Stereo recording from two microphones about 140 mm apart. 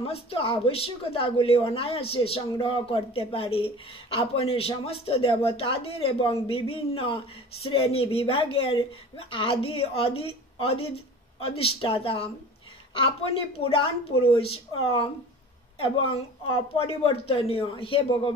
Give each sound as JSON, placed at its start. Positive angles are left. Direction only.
{"t": 0.0, "sound": "a woman's voice", "side_deg": 40}